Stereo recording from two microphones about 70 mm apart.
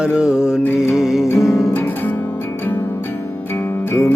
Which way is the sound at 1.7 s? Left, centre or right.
Left.